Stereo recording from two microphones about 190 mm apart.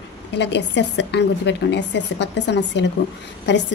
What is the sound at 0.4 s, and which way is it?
A woman's voice, 65° left (ahead or behind).